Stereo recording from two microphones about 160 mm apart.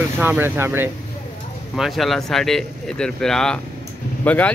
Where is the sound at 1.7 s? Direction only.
Centre (ahead or behind).